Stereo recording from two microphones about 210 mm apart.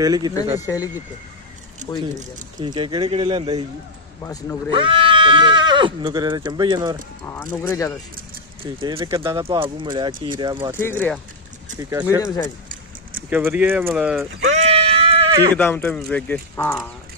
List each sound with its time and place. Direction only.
0.0 s speech: 20° right (ahead or behind)
0.6 s speech: 15° left (ahead or behind)
1.9 s speech: 15° left (ahead or behind)
2.6 s speech: 25° right (ahead or behind)
4.2 s speech: 10° left (ahead or behind)
4.6 s speech: 25° right (ahead or behind)
7.6 s speech: 15° left (ahead or behind)
8.7 s speech: 20° right (ahead or behind)
10.8 s speech: 10° left (ahead or behind)
11.8 s speech: 10° right (ahead or behind)
13.3 s speech: 10° right (ahead or behind)
14.5 s sheep: 30° right (ahead or behind)
15.5 s speech: 10° left (ahead or behind)